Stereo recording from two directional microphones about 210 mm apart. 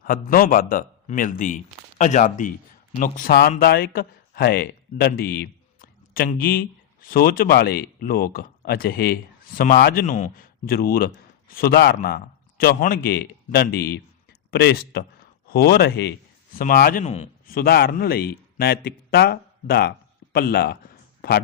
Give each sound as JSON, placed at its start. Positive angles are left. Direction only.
{"t": 0.0, "sound": "speech", "side_deg": 45}
{"t": 17.4, "sound": "speech", "side_deg": 45}
{"t": 21.2, "sound": "a sound", "side_deg": 45}